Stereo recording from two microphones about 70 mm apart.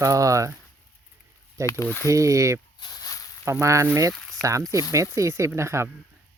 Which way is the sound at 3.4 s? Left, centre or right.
Right.